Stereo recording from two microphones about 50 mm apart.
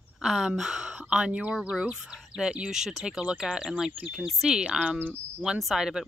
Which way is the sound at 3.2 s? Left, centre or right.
Right.